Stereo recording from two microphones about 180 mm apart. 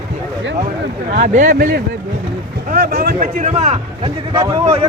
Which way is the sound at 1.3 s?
45° right (ahead or behind).